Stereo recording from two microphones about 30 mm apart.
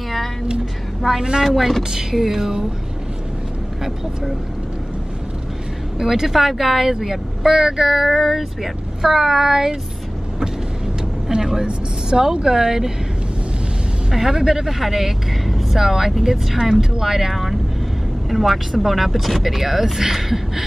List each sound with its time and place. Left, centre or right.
1.0 s speech: centre
1.8 s speech: centre
5.9 s speech: centre
11.3 s a sound: right
12.4 s speech: centre
14.1 s speech: centre